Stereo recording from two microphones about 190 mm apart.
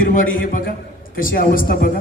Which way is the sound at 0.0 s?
45° left (ahead or behind).